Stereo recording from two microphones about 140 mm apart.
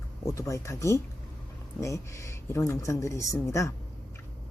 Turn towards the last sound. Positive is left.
turn(degrees=20)  # may be behind; listen again after turning